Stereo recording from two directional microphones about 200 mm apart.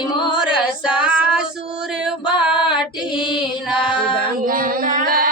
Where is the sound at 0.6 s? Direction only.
5° right (ahead or behind).